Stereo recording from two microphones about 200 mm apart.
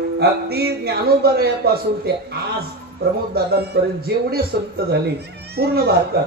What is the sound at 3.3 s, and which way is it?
Speech, 50° right (ahead or behind).